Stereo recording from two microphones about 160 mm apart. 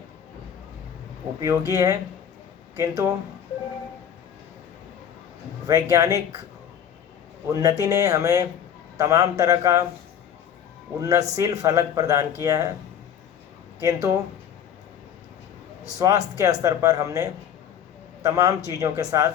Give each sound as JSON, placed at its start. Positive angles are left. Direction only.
{"t": 1.4, "sound": "speech", "side_deg": -20}
{"t": 5.6, "sound": "speech", "side_deg": -20}
{"t": 7.5, "sound": "speech", "side_deg": -20}
{"t": 11.0, "sound": "speech", "side_deg": -20}
{"t": 13.7, "sound": "speech", "side_deg": -20}
{"t": 16.0, "sound": "speech", "side_deg": -20}